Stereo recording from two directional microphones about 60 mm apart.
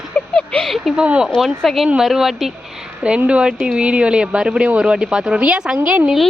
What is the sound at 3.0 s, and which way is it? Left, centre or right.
Speech, centre.